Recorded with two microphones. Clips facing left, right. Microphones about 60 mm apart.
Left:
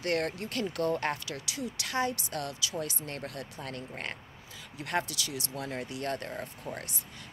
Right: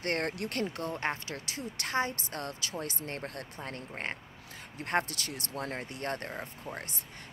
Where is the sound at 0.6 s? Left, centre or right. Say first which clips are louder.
Left 4 dB; right.